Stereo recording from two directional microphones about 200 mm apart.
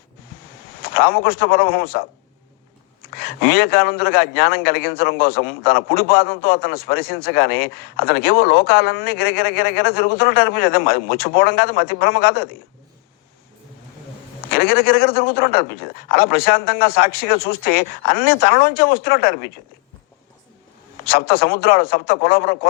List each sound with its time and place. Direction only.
0.8 s a man's voice: 50° left (ahead or behind)
3.2 s a man's voice: 50° left (ahead or behind)
14.5 s a man's voice: 50° left (ahead or behind)
21.0 s a man's voice: 50° left (ahead or behind)